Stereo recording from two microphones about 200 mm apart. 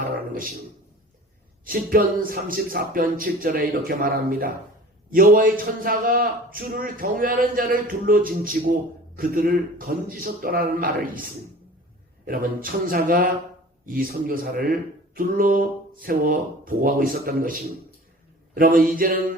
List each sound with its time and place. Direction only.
1.6 s a man's voice: 45° right (ahead or behind)